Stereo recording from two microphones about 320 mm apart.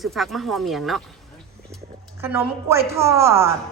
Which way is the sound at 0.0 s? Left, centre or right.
Centre.